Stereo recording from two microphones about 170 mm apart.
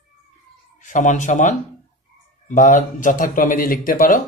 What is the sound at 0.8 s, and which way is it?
A man's voice, 45° left (ahead or behind).